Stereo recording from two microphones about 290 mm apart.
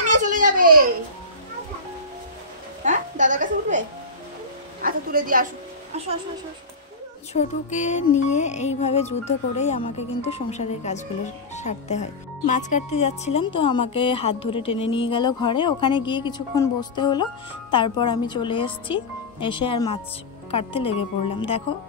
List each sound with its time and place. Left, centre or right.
0.2 s a sound: right
2.8 s music: right
4.8 s a woman's voice: right
7.3 s speech: left